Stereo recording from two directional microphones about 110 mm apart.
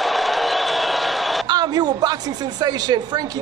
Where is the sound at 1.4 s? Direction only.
40° right (ahead or behind).